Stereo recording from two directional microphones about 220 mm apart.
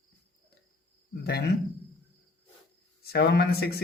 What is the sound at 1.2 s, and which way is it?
Speech, 45° left (ahead or behind).